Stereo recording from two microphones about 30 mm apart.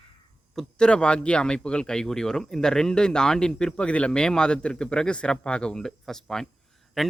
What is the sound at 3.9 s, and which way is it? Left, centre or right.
Speech, left.